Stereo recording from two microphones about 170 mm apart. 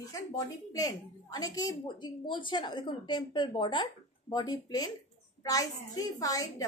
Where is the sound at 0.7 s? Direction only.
20° left (ahead or behind).